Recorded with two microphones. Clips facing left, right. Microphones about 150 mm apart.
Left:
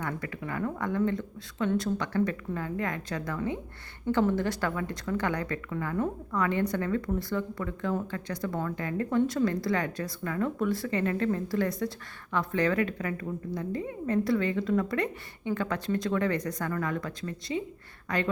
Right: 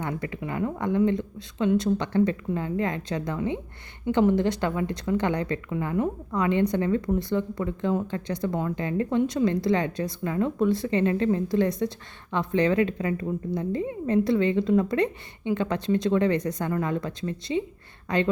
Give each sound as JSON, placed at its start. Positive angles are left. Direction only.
{"t": 0.0, "sound": "a woman's voice", "side_deg": -25}